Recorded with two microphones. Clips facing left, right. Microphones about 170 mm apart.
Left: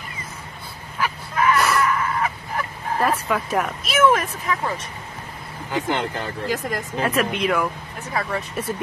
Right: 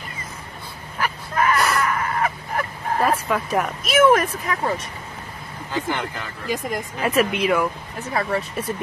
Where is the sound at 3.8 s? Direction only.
45° right (ahead or behind).